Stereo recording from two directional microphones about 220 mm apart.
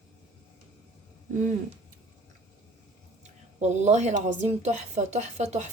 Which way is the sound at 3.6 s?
30° right (ahead or behind).